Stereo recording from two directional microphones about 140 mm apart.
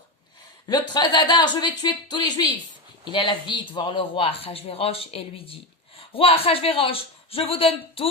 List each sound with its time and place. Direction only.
0.7 s a man's voice: 30° left (ahead or behind)